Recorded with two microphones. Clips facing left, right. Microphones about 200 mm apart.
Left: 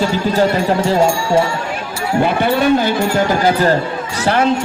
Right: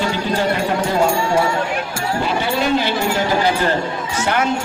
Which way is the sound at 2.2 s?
50° left (ahead or behind).